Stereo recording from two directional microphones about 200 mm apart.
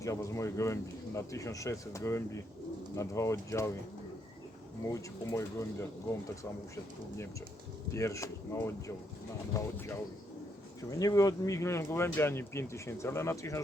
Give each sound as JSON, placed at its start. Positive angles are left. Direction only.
{"t": 0.0, "sound": "speech", "side_deg": 15}
{"t": 4.9, "sound": "speech", "side_deg": 15}
{"t": 7.9, "sound": "speech", "side_deg": 15}